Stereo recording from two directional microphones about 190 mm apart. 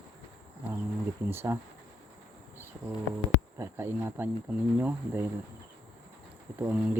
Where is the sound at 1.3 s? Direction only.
10° right (ahead or behind).